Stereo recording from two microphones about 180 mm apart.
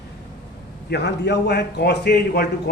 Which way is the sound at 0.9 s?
70° left (ahead or behind).